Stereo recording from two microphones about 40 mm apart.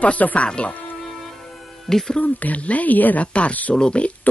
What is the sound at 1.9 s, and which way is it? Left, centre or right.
Speech, centre.